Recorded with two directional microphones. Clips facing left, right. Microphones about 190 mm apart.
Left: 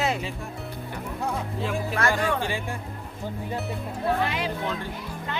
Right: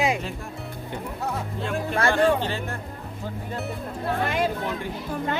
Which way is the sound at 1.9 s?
30° right (ahead or behind).